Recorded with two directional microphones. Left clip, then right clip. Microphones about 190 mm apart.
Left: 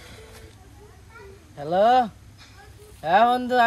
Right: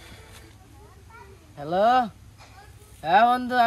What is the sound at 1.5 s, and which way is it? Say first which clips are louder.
Speech: left 2 dB; 10° left (ahead or behind).